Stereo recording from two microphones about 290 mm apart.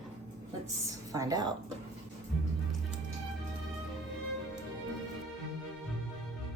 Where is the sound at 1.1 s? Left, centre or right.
Centre.